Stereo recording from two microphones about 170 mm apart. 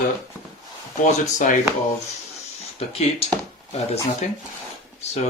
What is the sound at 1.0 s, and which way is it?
Speech, 50° left (ahead or behind).